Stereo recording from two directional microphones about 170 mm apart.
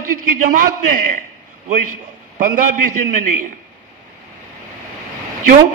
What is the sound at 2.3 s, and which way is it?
Speech, 50° right (ahead or behind).